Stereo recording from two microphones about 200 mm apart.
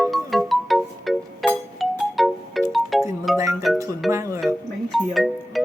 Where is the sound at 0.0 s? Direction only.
Centre (ahead or behind).